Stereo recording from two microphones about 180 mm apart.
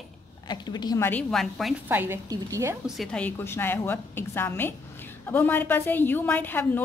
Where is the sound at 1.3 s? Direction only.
Centre (ahead or behind).